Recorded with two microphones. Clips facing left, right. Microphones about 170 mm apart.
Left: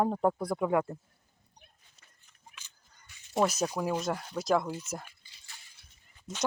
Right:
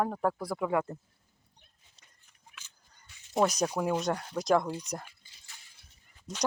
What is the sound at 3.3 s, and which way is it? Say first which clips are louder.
Speech: right 1 dB; 5° left (ahead or behind).